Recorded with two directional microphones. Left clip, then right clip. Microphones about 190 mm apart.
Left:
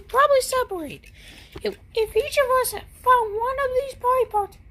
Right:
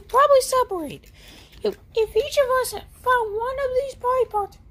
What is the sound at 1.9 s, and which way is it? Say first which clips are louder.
A woman's voice: even; 10° right (ahead or behind).